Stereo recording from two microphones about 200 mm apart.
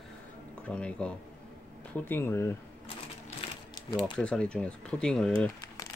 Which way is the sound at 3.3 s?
20° left (ahead or behind).